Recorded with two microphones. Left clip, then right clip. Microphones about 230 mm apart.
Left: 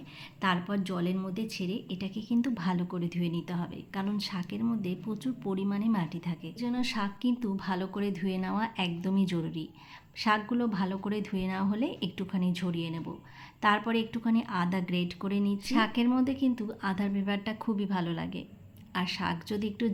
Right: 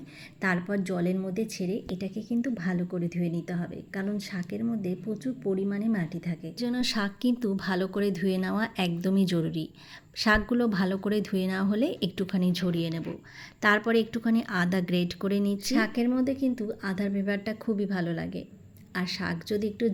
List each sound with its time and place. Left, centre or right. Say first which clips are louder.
0.4 s a woman's voice: right 2 dB; centre
2.3 s a woman's voice: even; centre